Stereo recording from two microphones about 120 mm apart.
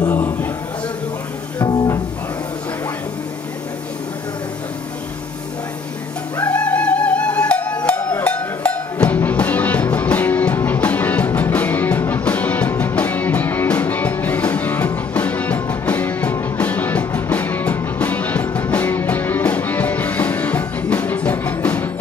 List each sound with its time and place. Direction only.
0.1 s a sound: 15° left (ahead or behind)
1.6 s music: 35° left (ahead or behind)
6.4 s music: 10° left (ahead or behind)